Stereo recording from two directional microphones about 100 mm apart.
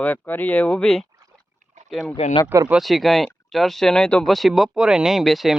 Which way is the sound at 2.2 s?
85° left.